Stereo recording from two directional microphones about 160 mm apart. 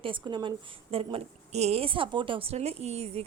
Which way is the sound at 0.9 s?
40° right (ahead or behind).